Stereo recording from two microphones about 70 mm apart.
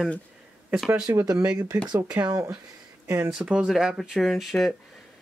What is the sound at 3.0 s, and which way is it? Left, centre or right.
Speech, right.